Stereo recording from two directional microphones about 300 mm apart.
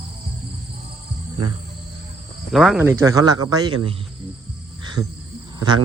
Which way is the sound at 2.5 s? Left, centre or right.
Centre.